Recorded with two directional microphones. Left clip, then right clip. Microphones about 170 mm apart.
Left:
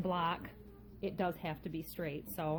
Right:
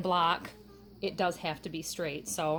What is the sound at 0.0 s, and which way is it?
A woman's voice, 15° right (ahead or behind).